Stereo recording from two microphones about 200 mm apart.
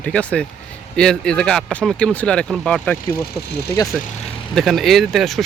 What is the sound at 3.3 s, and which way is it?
Speech, 55° left (ahead or behind).